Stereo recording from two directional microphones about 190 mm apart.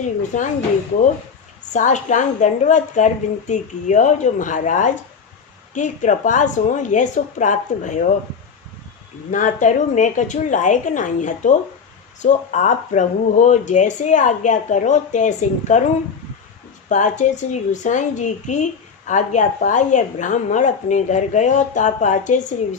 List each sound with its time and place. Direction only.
0.0 s speech: 40° left (ahead or behind)
1.7 s speech: 40° left (ahead or behind)
9.3 s speech: 40° left (ahead or behind)
16.9 s speech: 40° left (ahead or behind)